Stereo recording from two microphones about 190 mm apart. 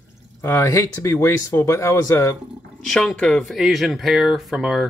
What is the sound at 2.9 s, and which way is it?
Speech, centre (ahead or behind).